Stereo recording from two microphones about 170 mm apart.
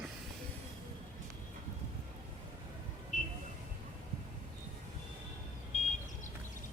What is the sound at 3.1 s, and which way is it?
Vehicle, 50° left (ahead or behind).